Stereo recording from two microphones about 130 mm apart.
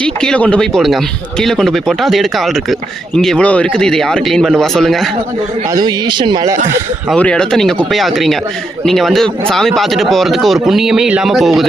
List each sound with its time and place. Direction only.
0.0 s speech: 5° left (ahead or behind)
5.7 s speech: 35° right (ahead or behind)
7.2 s speech: 10° left (ahead or behind)